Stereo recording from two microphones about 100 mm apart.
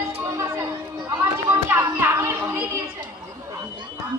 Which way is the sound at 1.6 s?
25° right (ahead or behind).